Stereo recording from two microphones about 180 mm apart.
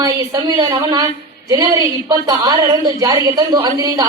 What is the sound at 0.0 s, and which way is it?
A woman's voice, 20° right (ahead or behind).